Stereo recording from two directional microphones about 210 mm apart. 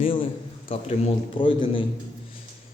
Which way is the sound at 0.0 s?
25° left (ahead or behind).